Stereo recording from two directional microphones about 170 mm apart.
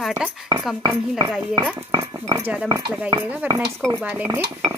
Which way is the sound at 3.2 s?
10° right (ahead or behind).